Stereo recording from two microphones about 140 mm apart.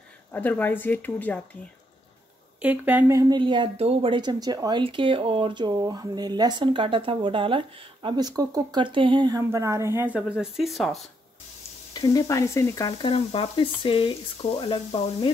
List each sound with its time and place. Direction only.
0.3 s speech: 10° left (ahead or behind)
2.6 s a woman's voice: 10° right (ahead or behind)
3.2 s speech: 30° right (ahead or behind); by 11.1 s centre (ahead or behind)
11.9 s speech: 25° left (ahead or behind)
13.0 s frying: 40° left (ahead or behind)